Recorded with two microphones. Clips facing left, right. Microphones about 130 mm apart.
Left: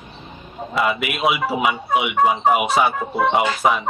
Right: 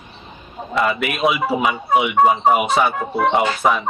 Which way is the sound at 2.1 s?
35° right (ahead or behind).